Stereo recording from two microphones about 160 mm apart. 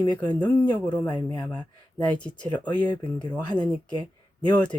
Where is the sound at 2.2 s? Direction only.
10° left (ahead or behind).